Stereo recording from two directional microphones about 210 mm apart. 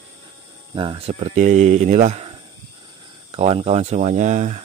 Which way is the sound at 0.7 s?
25° right (ahead or behind).